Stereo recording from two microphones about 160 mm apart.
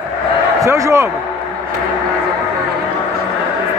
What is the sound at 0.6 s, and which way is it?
Speech, 20° right (ahead or behind).